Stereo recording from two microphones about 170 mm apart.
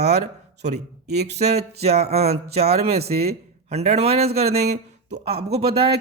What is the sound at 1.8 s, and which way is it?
Speech, 40° right (ahead or behind).